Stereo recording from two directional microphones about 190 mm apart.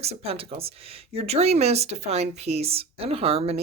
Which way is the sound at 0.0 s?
30° right (ahead or behind).